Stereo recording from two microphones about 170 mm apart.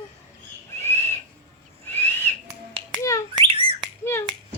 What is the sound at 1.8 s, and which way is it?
Whistle, 10° left (ahead or behind).